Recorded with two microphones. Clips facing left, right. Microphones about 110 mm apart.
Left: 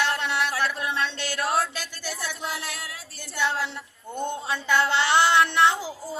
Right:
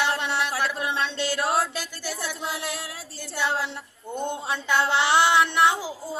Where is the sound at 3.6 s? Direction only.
15° right (ahead or behind).